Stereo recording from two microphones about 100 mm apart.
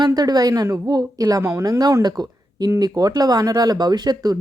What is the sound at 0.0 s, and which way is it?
A woman's voice, 40° right (ahead or behind).